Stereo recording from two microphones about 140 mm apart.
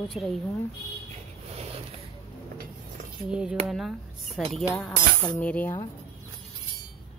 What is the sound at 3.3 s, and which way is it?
Speech, 5° right (ahead or behind).